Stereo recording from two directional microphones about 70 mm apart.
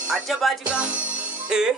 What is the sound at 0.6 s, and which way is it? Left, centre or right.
Music, centre.